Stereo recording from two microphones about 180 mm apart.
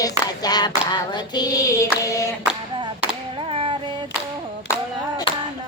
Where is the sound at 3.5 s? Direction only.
30° right (ahead or behind).